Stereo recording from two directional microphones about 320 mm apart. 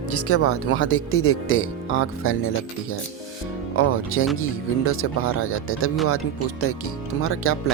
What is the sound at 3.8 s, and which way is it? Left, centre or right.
Speech, left.